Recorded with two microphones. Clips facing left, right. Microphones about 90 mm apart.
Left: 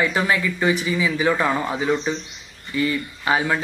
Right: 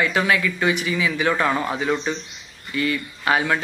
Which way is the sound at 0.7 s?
30° left (ahead or behind).